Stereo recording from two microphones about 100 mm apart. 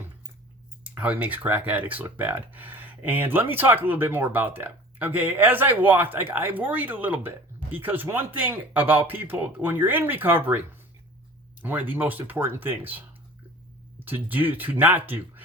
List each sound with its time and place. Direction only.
0.9 s speech: 15° right (ahead or behind)
11.6 s speech: 15° right (ahead or behind)